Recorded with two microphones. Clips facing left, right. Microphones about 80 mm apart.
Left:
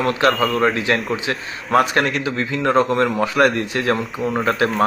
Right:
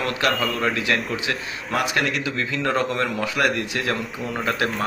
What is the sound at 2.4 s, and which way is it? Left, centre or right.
Speech, left.